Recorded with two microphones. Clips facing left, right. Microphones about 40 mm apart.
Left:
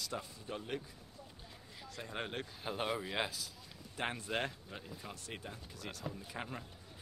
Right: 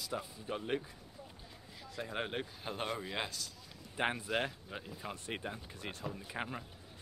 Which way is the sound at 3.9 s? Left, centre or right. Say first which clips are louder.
Right 3 dB; centre.